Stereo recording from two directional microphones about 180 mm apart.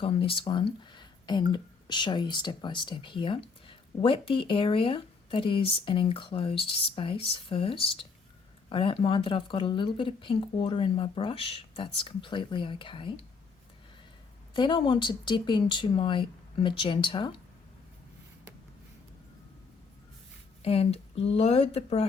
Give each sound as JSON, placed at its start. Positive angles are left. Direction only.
{"t": 0.0, "sound": "speech", "side_deg": 30}
{"t": 14.5, "sound": "speech", "side_deg": 25}
{"t": 20.6, "sound": "speech", "side_deg": 35}